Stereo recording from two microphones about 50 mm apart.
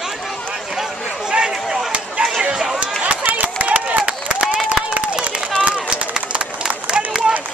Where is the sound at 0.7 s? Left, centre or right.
Centre.